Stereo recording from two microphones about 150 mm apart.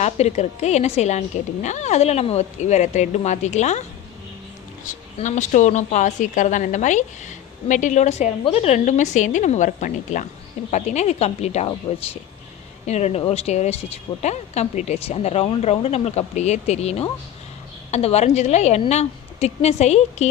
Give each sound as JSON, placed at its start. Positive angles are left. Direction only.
{"t": 0.0, "sound": "a woman's voice", "side_deg": 45}
{"t": 5.1, "sound": "a woman's voice", "side_deg": 50}